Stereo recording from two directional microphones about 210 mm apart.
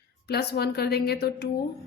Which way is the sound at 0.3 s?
50° left (ahead or behind).